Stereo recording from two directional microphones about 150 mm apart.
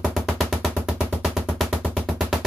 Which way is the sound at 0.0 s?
Centre (ahead or behind).